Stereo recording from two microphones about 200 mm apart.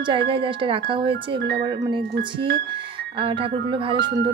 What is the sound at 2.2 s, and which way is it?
Speech, 50° right (ahead or behind).